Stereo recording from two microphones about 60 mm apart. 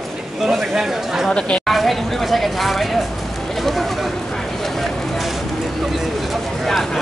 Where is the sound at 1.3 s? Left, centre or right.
Centre.